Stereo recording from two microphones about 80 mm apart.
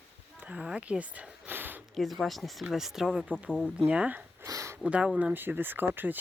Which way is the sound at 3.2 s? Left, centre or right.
Centre.